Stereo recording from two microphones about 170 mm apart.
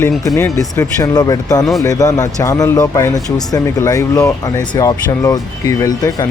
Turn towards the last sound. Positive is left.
turn(degrees=20)  # may be behind; listen again after turning